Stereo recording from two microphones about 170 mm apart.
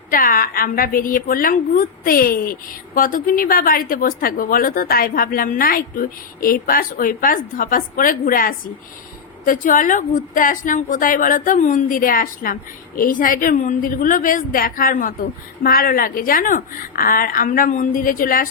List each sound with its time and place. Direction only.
0.1 s a woman's voice: 55° left (ahead or behind)